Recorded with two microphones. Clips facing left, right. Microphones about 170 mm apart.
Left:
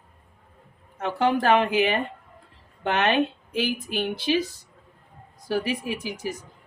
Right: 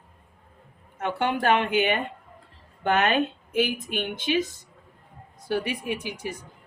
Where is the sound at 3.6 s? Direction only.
35° left (ahead or behind).